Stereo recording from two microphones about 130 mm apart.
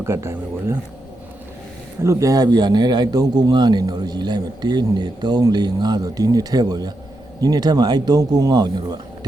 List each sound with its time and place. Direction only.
0.0 s speech: 20° right (ahead or behind)
2.0 s speech: 25° right (ahead or behind)